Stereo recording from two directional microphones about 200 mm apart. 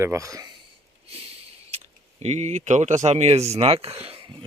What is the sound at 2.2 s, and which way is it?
Speech, 35° right (ahead or behind).